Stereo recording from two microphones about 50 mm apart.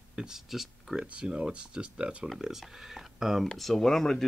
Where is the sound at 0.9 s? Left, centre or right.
Centre.